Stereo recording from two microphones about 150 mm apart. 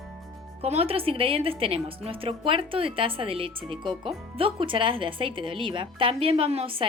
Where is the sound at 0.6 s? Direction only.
40° right (ahead or behind).